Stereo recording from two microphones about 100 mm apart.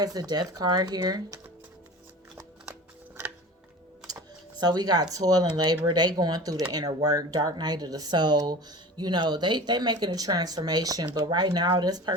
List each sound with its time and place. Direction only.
0.0 s speech: 40° right (ahead or behind)
4.0 s a sound: 40° right (ahead or behind)
5.1 s speech: 40° right (ahead or behind)